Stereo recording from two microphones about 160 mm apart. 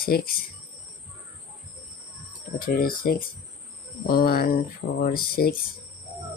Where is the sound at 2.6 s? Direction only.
65° left (ahead or behind).